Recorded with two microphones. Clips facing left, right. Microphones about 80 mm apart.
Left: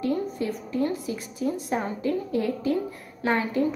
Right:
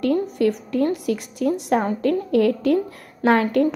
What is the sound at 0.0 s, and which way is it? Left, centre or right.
A woman's voice, right.